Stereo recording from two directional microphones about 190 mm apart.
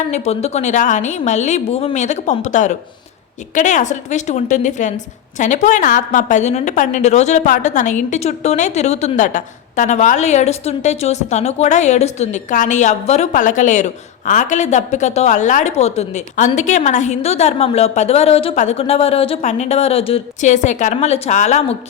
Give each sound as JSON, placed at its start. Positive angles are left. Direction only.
{"t": 0.1, "sound": "a woman's voice", "side_deg": 35}